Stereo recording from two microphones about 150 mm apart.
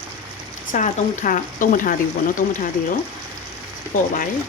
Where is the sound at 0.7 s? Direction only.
60° left (ahead or behind).